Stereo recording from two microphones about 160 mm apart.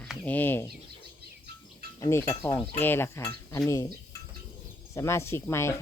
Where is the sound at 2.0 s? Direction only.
15° left (ahead or behind).